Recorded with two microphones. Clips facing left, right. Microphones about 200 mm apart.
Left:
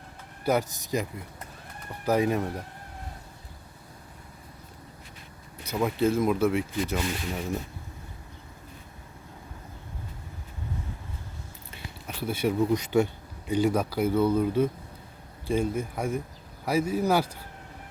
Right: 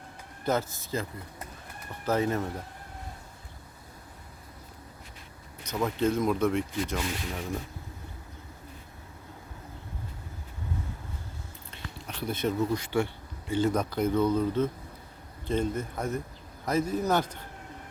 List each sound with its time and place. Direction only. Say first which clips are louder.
0.4 s speech: left 3 dB; 15° left (ahead or behind)
2.0 s speech: left 3 dB; 15° left (ahead or behind)
5.6 s speech: left 2 dB; 10° left (ahead or behind)
11.7 s speech: left 1 dB; 5° left (ahead or behind)